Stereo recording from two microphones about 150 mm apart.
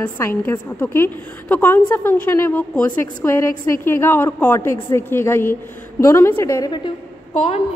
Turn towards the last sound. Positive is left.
turn(degrees=45)  # may be behind; listen again after turning